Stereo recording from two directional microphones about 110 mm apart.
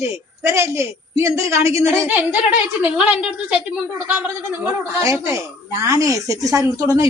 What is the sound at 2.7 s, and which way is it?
Speech, 10° right (ahead or behind).